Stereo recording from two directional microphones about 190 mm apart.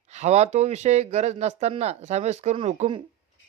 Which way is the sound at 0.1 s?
35° right (ahead or behind).